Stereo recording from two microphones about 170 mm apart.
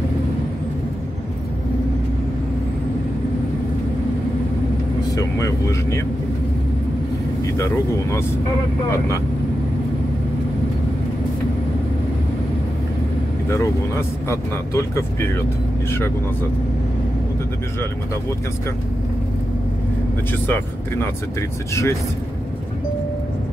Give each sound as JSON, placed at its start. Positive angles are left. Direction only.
{"t": 5.1, "sound": "speech", "side_deg": 20}
{"t": 7.5, "sound": "speech", "side_deg": 15}
{"t": 13.5, "sound": "speech", "side_deg": 15}
{"t": 20.4, "sound": "speech", "side_deg": 15}